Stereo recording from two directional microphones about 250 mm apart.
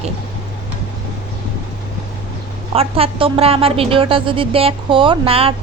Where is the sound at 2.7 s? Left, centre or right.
Right.